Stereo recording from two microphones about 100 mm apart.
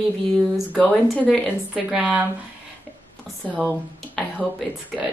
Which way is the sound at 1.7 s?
5° right (ahead or behind).